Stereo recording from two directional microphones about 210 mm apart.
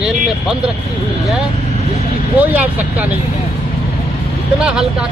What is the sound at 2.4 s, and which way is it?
Speech, 5° right (ahead or behind).